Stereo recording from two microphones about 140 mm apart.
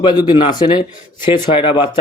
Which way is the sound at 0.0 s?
30° left (ahead or behind).